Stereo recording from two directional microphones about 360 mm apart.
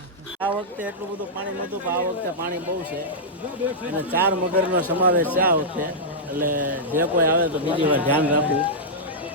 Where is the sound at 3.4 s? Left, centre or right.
Centre.